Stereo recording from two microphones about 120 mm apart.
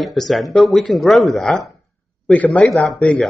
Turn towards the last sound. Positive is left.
turn(degrees=0)  # may be behind; listen again after turning